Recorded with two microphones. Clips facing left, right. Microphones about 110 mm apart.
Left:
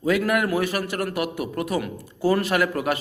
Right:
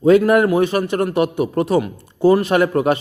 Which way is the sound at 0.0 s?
30° right (ahead or behind).